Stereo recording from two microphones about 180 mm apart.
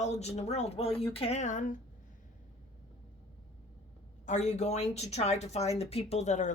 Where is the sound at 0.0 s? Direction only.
40° left (ahead or behind).